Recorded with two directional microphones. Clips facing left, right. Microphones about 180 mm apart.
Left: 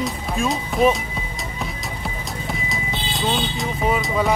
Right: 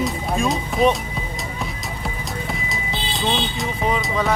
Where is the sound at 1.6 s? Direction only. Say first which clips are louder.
Left 2 dB; centre (ahead or behind).